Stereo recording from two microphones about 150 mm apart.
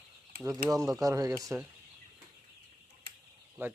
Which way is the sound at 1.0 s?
25° right (ahead or behind).